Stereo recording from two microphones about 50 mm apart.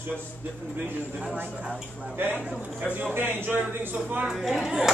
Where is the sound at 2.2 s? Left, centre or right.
Right.